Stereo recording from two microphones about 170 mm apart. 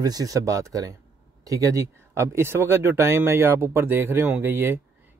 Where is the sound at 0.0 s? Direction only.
20° right (ahead or behind).